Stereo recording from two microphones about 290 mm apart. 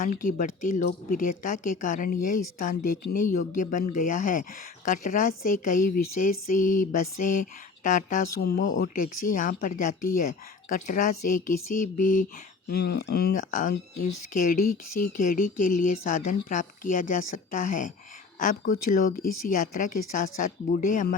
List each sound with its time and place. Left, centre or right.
0.0 s speech: left